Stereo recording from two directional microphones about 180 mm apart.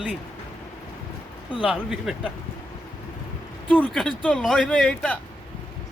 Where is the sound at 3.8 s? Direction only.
5° left (ahead or behind).